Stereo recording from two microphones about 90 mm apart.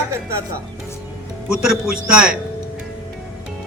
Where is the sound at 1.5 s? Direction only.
5° right (ahead or behind).